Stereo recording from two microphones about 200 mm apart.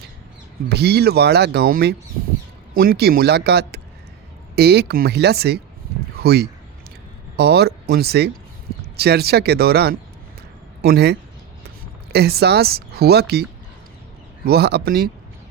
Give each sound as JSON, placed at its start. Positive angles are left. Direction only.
{"t": 0.7, "sound": "a man's voice", "side_deg": -55}
{"t": 14.4, "sound": "speech", "side_deg": -55}